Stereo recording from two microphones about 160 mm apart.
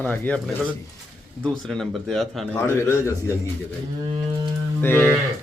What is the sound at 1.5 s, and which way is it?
Speech, 5° left (ahead or behind).